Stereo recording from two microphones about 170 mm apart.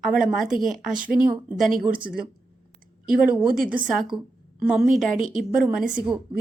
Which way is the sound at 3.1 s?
5° right (ahead or behind).